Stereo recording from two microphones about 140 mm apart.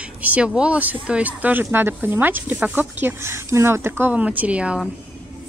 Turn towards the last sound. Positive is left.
turn(degrees=-10)  # may be behind; listen again after turning